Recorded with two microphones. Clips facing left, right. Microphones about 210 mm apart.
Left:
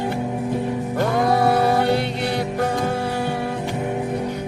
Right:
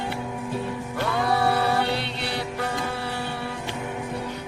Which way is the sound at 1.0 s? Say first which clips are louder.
Left 5 dB; 45° left (ahead or behind).